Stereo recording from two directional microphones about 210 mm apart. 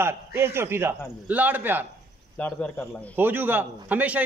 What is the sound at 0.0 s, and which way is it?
A man's voice, 10° right (ahead or behind).